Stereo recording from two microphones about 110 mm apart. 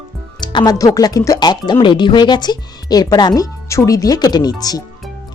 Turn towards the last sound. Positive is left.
turn(degrees=35)  # may be behind; listen again after turning